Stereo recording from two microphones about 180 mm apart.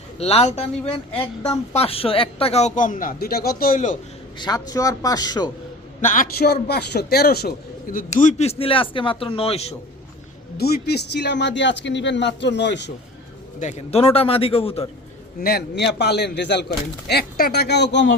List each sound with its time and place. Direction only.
0.2 s a man's voice: 35° left (ahead or behind)
4.4 s a man's voice: 20° left (ahead or behind)
6.0 s a man's voice: 45° left (ahead or behind)
10.6 s speech: 65° left (ahead or behind)
13.6 s speech: 40° left (ahead or behind)
15.4 s speech: 60° left (ahead or behind); by 18.1 s 75° left (ahead or behind)